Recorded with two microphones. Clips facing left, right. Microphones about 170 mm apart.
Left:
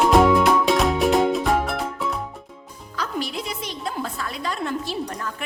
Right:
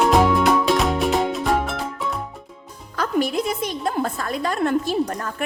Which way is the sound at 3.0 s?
50° right (ahead or behind).